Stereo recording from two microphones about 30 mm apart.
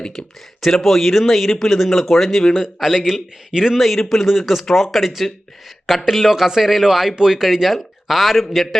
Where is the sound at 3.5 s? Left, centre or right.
Centre.